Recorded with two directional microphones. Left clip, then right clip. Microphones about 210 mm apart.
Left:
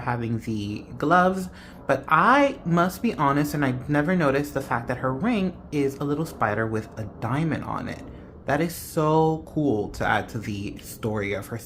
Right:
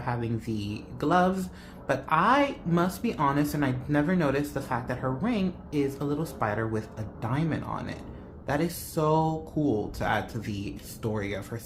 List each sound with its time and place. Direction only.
0.0 s speech: 25° left (ahead or behind)